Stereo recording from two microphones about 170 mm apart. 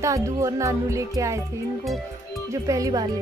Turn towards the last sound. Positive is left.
turn(degrees=-20)  # may be behind; listen again after turning